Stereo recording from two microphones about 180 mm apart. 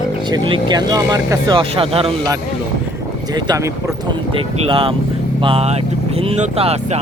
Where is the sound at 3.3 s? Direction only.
20° right (ahead or behind).